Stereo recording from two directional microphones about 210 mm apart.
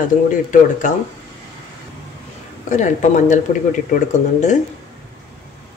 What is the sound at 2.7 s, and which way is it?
Speech, 35° left (ahead or behind).